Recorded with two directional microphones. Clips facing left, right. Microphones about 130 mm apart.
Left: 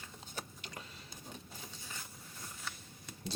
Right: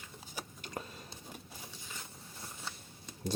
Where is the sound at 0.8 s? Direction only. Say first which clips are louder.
Right 9 dB; 40° right (ahead or behind).